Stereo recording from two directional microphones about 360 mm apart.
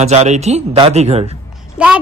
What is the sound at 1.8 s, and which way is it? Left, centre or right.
Speech, centre.